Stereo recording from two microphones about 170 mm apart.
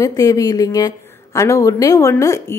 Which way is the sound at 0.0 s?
20° left (ahead or behind).